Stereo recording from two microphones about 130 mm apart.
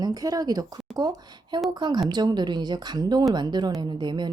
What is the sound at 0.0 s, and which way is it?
A woman's voice, 30° right (ahead or behind).